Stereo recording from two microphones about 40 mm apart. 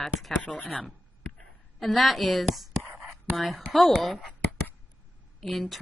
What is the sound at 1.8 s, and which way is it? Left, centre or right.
Speech, centre.